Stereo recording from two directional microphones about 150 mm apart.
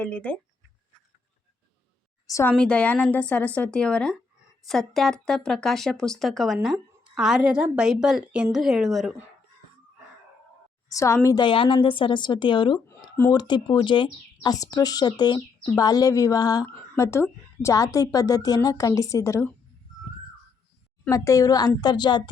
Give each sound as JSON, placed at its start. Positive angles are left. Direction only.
{"t": 0.0, "sound": "a woman's voice", "side_deg": 5}
{"t": 2.2, "sound": "a woman's voice", "side_deg": 20}
{"t": 10.8, "sound": "a woman's voice", "side_deg": 20}
{"t": 11.4, "sound": "a woman's voice", "side_deg": 35}
{"t": 13.2, "sound": "a woman's voice", "side_deg": 10}
{"t": 13.5, "sound": "speech", "side_deg": 30}
{"t": 21.1, "sound": "speech", "side_deg": 20}